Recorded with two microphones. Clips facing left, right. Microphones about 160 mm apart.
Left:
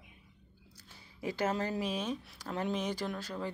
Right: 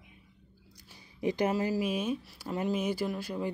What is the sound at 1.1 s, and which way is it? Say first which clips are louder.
Speech: right 4 dB; 15° right (ahead or behind).